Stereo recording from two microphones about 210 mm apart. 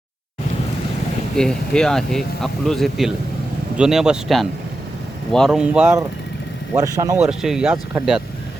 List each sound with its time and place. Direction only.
1.4 s speech: 5° left (ahead or behind); by 7.2 s 15° right (ahead or behind)
7.2 s speech: 5° right (ahead or behind)